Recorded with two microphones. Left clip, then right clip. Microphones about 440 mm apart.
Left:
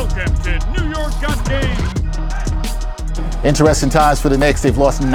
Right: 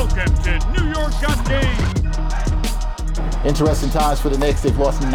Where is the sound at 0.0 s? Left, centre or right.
Centre.